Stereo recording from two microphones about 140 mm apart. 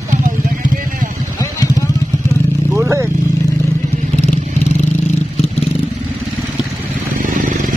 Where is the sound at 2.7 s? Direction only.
20° right (ahead or behind).